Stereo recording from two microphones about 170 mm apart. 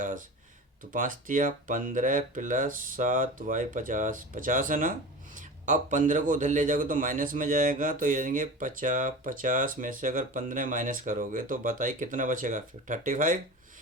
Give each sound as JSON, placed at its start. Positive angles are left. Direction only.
{"t": 0.9, "sound": "a man's voice", "side_deg": -50}